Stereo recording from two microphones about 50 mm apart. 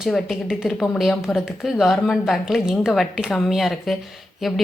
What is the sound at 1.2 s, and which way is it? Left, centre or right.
A woman's voice, centre.